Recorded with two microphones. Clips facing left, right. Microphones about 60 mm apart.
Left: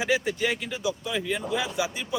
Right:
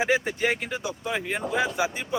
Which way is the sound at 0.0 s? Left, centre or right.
Right.